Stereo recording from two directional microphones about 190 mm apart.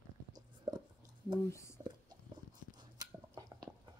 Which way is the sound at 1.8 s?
20° right (ahead or behind).